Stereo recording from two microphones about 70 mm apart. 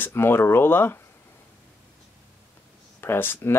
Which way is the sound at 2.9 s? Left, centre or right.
Left.